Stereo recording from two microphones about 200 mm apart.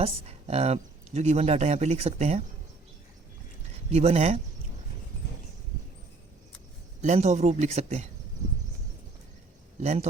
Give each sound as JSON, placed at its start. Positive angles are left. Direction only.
{"t": 0.0, "sound": "speech", "side_deg": -30}
{"t": 3.9, "sound": "speech", "side_deg": -30}
{"t": 7.0, "sound": "speech", "side_deg": -35}
{"t": 9.8, "sound": "speech", "side_deg": -35}